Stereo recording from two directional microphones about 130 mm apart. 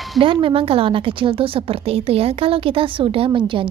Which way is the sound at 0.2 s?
40° right (ahead or behind).